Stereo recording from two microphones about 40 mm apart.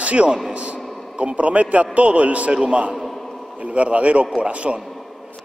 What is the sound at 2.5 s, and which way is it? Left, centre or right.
A man's voice, right.